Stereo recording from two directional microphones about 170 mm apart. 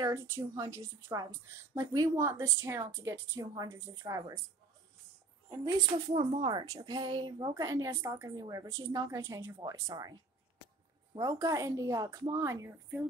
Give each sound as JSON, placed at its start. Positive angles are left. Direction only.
{"t": 0.0, "sound": "a woman's voice", "side_deg": -15}
{"t": 5.7, "sound": "a woman's voice", "side_deg": -25}
{"t": 11.1, "sound": "a woman's voice", "side_deg": -20}